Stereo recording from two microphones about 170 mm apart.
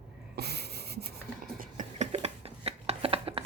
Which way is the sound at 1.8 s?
40° right (ahead or behind).